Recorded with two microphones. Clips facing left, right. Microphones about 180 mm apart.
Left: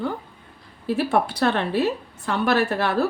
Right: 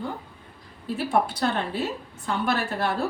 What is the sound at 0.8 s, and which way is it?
Speech, 70° left (ahead or behind).